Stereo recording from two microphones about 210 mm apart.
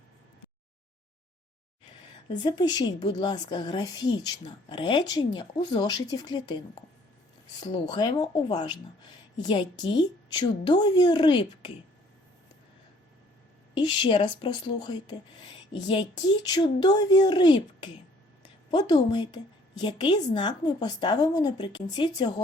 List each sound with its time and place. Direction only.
2.4 s a woman's voice: 20° left (ahead or behind)
7.6 s a woman's voice: 20° left (ahead or behind)
13.7 s a woman's voice: 20° left (ahead or behind)